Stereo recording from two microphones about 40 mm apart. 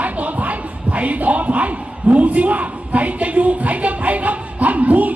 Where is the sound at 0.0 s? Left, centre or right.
Right.